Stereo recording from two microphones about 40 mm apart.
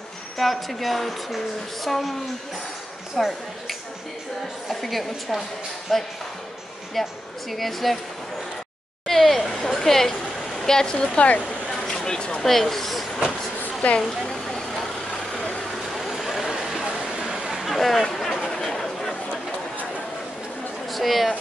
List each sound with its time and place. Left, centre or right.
0.4 s speech: centre
3.2 s speech: centre
9.0 s speech: centre
11.0 s speech: left
11.4 s a sound: centre
12.4 s speech: centre
13.8 s speech: left
15.8 s vehicle: centre
16.8 s a sound: right
17.6 s a sound: centre
20.9 s speech: centre